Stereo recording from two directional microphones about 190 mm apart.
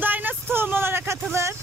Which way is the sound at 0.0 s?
10° right (ahead or behind).